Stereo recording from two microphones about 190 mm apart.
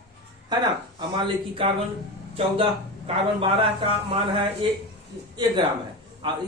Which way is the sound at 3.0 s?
30° right (ahead or behind).